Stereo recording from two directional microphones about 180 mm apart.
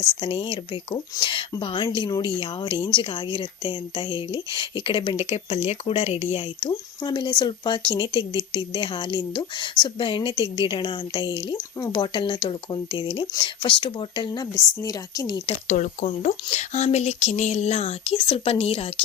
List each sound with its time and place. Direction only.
0.2 s speech: 30° left (ahead or behind)
15.6 s speech: 45° left (ahead or behind)